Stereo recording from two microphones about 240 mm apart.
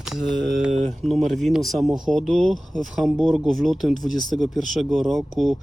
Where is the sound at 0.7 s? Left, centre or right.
Right.